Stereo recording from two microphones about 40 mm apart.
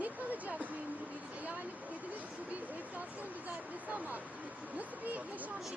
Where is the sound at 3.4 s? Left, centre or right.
Right.